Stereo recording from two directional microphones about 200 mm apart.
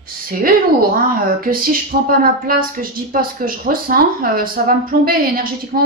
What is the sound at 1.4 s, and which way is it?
Speech, 45° right (ahead or behind).